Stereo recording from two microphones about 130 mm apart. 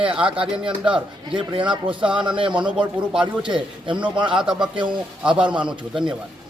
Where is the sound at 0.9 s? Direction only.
5° right (ahead or behind).